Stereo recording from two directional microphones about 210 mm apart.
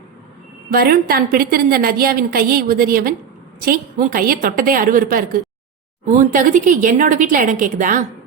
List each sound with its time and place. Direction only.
0.7 s a woman's voice: 45° right (ahead or behind)